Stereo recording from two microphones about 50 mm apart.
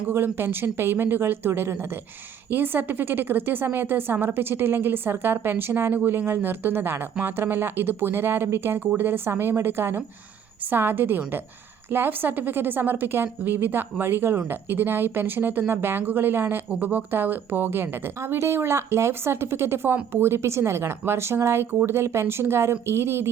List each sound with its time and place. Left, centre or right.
0.1 s a woman's voice: right
18.3 s speech: right
19.9 s speech: right